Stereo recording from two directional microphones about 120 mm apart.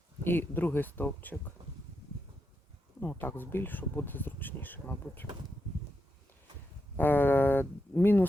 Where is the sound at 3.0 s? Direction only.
15° left (ahead or behind).